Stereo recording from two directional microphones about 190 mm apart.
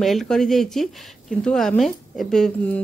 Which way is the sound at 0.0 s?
Centre (ahead or behind).